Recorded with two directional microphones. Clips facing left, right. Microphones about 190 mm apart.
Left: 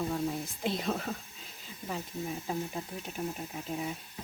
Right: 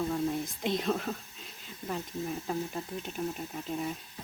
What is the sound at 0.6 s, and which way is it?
Speech, 5° left (ahead or behind).